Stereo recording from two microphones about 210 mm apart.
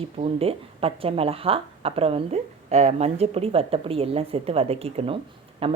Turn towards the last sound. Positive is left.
turn(degrees=-25)  # may be behind; listen again after turning